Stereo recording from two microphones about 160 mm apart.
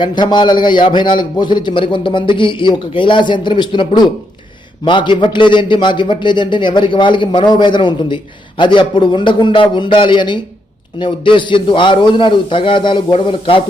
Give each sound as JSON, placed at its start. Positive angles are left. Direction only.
{"t": 0.0, "sound": "a man's voice", "side_deg": 30}